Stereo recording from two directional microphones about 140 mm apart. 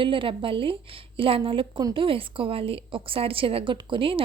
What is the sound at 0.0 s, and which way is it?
A woman's voice, 35° right (ahead or behind).